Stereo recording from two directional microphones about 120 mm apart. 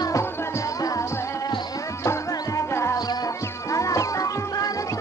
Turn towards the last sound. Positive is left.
turn(degrees=30)  # may be behind; listen again after turning